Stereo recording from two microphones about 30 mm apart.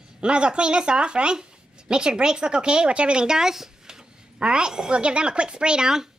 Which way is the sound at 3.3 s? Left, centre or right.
Centre.